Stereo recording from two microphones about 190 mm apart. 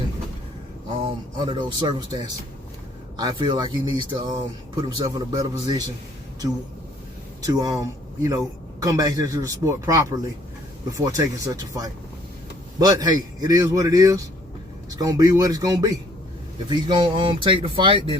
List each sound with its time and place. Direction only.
1.0 s speech: 25° right (ahead or behind)
3.2 s speech: 20° right (ahead or behind)
7.4 s speech: 20° right (ahead or behind)